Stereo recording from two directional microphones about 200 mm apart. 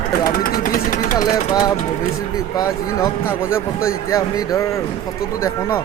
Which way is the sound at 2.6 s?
15° left (ahead or behind).